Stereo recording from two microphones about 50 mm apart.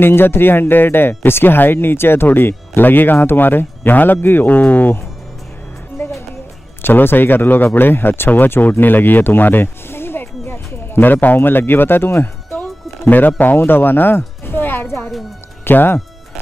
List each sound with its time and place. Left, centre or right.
0.0 s speech: left
4.5 s speech: left
6.0 s music: left
6.8 s speech: left
13.0 s speech: left